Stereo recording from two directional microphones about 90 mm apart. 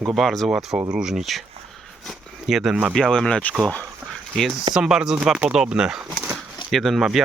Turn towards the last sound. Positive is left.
turn(degrees=0)  # may be behind; listen again after turning